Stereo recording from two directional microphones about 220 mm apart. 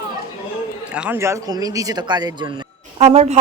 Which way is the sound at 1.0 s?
10° right (ahead or behind).